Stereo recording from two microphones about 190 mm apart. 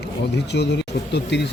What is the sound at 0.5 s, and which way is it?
Speech, 65° left (ahead or behind).